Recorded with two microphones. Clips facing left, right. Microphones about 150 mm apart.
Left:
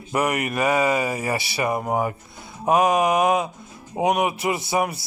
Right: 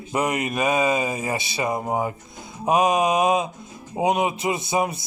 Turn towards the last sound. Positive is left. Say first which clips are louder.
# even
turn(degrees=-20)  # may be behind; listen again after turning